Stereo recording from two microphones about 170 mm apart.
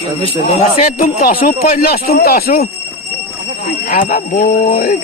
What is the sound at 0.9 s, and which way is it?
Speech, 60° left (ahead or behind).